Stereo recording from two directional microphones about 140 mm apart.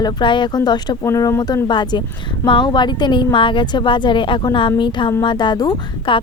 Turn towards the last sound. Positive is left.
turn(degrees=35)  # may be behind; listen again after turning